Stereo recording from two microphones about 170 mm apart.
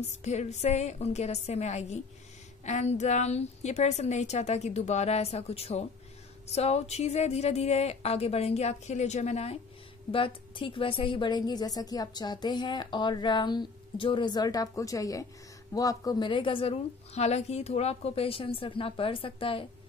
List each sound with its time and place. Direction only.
0.2 s a woman's voice: 40° left (ahead or behind)